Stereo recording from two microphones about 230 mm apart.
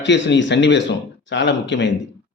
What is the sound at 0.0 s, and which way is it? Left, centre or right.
Speech, left.